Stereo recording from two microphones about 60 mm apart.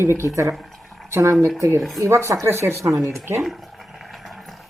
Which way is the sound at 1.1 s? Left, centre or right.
Right.